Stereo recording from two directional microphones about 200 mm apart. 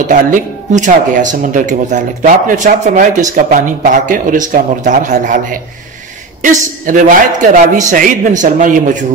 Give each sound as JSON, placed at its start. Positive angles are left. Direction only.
{"t": 0.1, "sound": "speech", "side_deg": -40}